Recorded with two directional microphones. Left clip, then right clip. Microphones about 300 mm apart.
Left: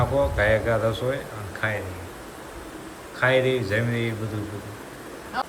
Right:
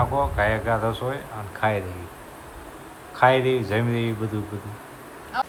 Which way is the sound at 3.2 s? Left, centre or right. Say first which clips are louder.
Right 2 dB; centre.